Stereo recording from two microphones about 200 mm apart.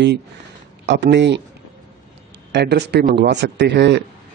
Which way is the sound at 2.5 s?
55° right (ahead or behind).